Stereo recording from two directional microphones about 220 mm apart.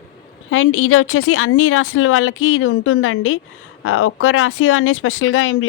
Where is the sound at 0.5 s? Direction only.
70° left (ahead or behind).